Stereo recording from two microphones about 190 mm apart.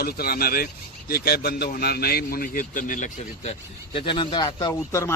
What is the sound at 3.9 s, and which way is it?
A man's voice, 25° left (ahead or behind).